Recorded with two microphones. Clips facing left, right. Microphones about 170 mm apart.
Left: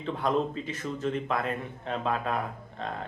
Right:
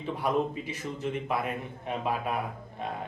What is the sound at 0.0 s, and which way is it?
Speech, 10° right (ahead or behind).